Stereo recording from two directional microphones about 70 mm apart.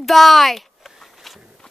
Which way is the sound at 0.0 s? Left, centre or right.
Centre.